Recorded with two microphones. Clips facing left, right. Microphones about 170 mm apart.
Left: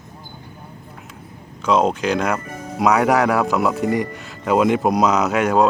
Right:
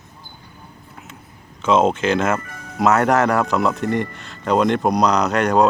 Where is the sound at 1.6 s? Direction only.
Centre (ahead or behind).